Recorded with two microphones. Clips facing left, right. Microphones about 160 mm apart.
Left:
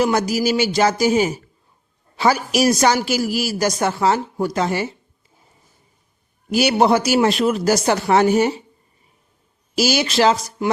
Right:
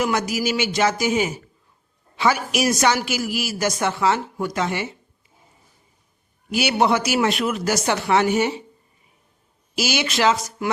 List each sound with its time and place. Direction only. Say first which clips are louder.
0.0 s a woman's voice: left 4 dB; 35° left (ahead or behind)
6.5 s a woman's voice: left 4 dB; 40° left (ahead or behind)
9.7 s a woman's voice: left 5 dB; 35° left (ahead or behind)